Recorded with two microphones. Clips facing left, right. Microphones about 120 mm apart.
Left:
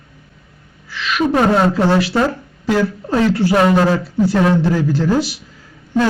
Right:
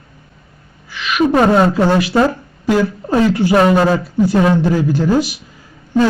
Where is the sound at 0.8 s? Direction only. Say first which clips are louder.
Right 3 dB; 15° right (ahead or behind).